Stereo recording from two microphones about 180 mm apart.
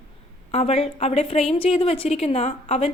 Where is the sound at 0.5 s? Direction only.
35° left (ahead or behind).